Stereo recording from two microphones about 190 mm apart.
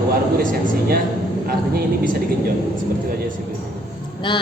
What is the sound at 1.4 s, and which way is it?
Speech, 50° right (ahead or behind).